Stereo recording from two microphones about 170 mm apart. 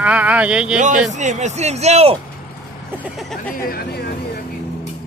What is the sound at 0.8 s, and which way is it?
A man's voice, 45° right (ahead or behind).